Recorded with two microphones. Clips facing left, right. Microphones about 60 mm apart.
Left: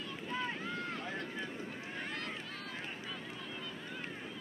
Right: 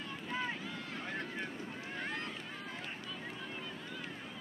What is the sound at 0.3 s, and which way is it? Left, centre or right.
Boat, centre.